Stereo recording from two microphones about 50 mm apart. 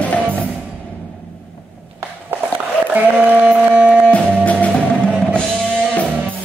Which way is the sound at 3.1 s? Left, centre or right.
Right.